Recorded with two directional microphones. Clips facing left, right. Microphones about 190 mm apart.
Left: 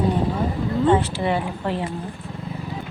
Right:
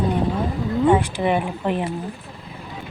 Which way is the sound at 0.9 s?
15° right (ahead or behind).